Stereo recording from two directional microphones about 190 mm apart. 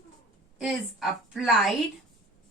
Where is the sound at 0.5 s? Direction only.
Centre (ahead or behind).